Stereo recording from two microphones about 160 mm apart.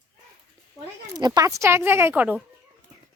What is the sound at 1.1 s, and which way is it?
Speech, 25° right (ahead or behind).